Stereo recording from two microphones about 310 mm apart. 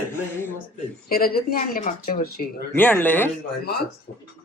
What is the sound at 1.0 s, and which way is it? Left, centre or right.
A man's voice, left.